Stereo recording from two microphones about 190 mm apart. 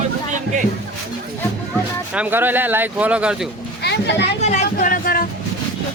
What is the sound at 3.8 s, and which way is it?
Children playing, 65° left (ahead or behind).